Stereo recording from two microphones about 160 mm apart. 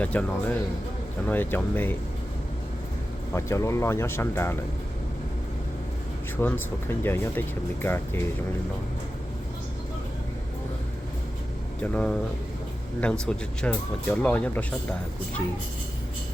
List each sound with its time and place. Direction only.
0.0 s speech: 10° left (ahead or behind)
3.3 s speech: 20° left (ahead or behind)
6.3 s speech: 15° left (ahead or behind)
11.8 s speech: 5° left (ahead or behind)